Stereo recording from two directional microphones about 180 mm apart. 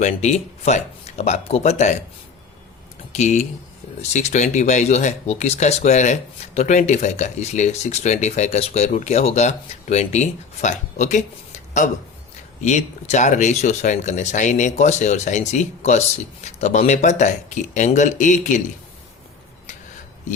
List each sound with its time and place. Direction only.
0.0 s speech: 40° left (ahead or behind)
3.1 s speech: 40° left (ahead or behind)
12.6 s speech: 40° left (ahead or behind)